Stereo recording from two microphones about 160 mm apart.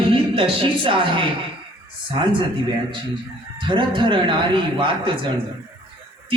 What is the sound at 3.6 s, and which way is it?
A woman's voice, 30° right (ahead or behind).